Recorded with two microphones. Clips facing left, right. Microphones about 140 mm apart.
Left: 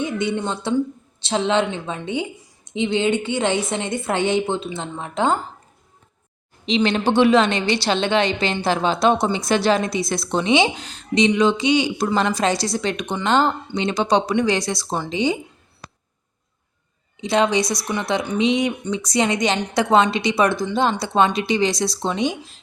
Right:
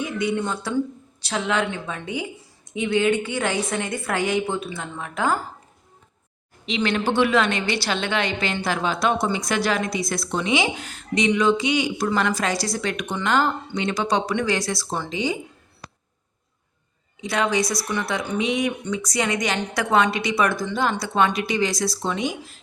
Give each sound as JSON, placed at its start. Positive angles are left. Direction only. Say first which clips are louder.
{"t": 0.0, "sound": "a woman's voice", "louder": "left 2 dB", "side_deg": 25}
{"t": 6.7, "sound": "a woman's voice", "louder": "left 4 dB", "side_deg": 25}
{"t": 17.2, "sound": "a woman's voice", "louder": "left 4 dB", "side_deg": 25}